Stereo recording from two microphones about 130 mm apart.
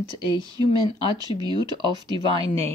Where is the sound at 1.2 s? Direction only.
30° right (ahead or behind).